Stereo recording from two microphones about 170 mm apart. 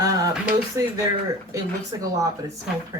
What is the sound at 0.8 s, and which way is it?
A woman's voice, 15° right (ahead or behind).